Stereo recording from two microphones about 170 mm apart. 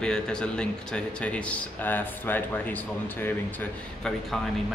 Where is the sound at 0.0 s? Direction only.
5° left (ahead or behind).